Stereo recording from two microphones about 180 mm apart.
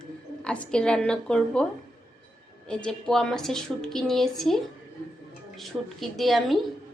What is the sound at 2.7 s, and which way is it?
A woman's voice, 5° left (ahead or behind).